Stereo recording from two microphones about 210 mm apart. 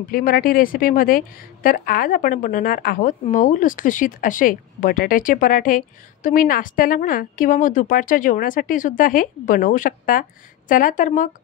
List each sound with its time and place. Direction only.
0.1 s a woman's voice: 45° left (ahead or behind)